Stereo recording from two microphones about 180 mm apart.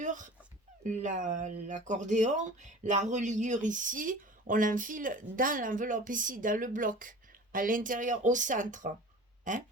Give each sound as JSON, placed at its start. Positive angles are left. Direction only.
{"t": 0.0, "sound": "dog", "side_deg": -45}
{"t": 0.9, "sound": "speech", "side_deg": -45}